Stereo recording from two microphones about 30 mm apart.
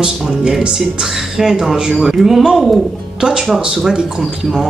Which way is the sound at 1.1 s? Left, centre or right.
Centre.